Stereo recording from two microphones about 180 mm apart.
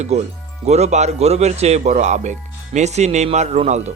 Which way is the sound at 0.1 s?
35° right (ahead or behind).